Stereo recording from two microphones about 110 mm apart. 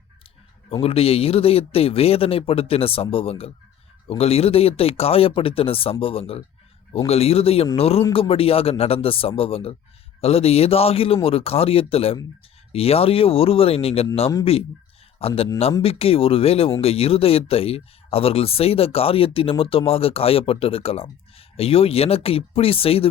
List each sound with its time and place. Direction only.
0.7 s speech: 60° left (ahead or behind)
15.2 s speech: 65° left (ahead or behind)